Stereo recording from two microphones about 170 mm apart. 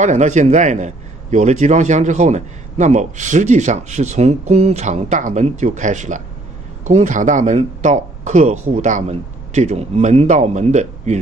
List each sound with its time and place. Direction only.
0.0 s a man's voice: 45° right (ahead or behind)